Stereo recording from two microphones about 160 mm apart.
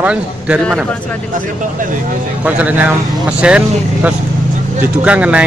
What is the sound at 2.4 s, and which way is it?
Speech, 10° right (ahead or behind).